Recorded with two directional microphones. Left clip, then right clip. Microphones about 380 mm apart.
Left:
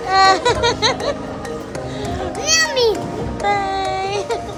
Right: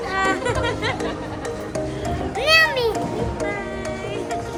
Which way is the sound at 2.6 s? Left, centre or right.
Centre.